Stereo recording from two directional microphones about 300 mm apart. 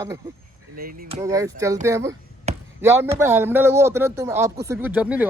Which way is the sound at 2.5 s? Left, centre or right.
Right.